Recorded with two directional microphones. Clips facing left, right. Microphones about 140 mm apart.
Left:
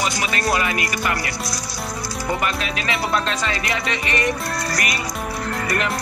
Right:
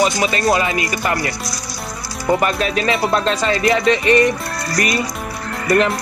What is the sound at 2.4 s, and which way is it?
Music, 40° right (ahead or behind).